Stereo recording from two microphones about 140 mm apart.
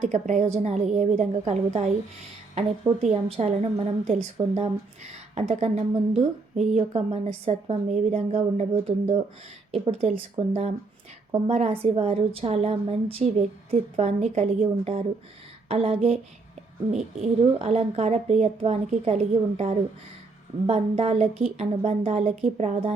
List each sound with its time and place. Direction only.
0.0 s a woman's voice: 60° right (ahead or behind)
3.0 s a woman's voice: 50° right (ahead or behind)